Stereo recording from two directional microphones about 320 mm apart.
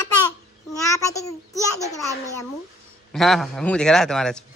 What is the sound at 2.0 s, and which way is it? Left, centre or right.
A man's voice, centre.